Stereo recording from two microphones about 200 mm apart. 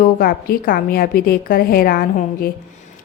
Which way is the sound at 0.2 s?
50° left (ahead or behind).